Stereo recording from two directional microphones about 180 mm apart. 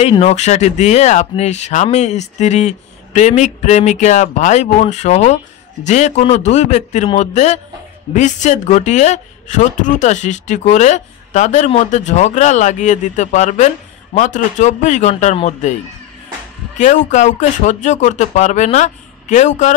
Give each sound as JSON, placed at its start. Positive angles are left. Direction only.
{"t": 0.0, "sound": "a woman's voice", "side_deg": 35}
{"t": 16.7, "sound": "a woman's voice", "side_deg": 40}